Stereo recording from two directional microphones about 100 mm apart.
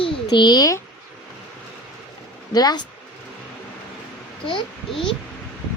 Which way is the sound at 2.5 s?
40° left (ahead or behind).